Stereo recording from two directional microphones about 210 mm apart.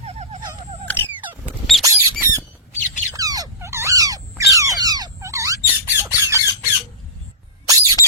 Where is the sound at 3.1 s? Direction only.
15° right (ahead or behind).